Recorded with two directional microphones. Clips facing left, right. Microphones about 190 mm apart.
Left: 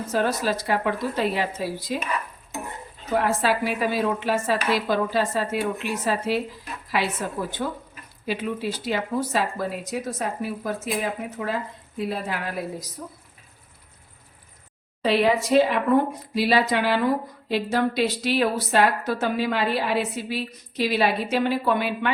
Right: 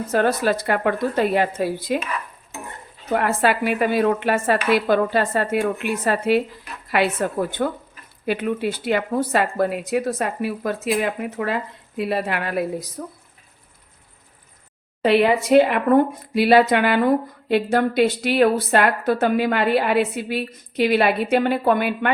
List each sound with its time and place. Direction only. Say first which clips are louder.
0.1 s a woman's voice: right 5 dB; 60° right (ahead or behind)
3.1 s a woman's voice: right 3 dB; 60° right (ahead or behind)
15.0 s a woman's voice: right 4 dB; 60° right (ahead or behind)